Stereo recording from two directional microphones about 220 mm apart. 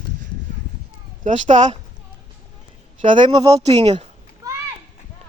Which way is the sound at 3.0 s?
20° right (ahead or behind).